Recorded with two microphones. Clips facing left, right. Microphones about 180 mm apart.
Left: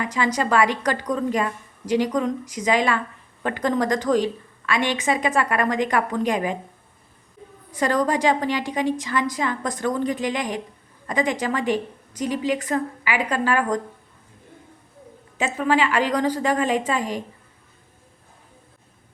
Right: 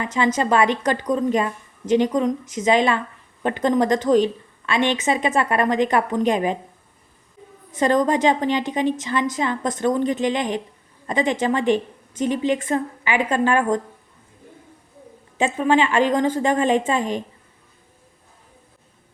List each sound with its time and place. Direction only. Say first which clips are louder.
0.0 s a woman's voice: right 2 dB; 25° right (ahead or behind)
7.7 s a woman's voice: right 3 dB; 25° right (ahead or behind)
15.4 s a woman's voice: right 3 dB; 25° right (ahead or behind)